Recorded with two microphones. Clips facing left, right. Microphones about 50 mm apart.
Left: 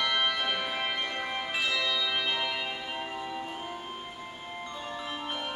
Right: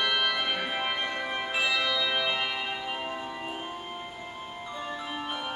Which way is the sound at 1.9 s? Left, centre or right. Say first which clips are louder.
Right 2 dB; centre.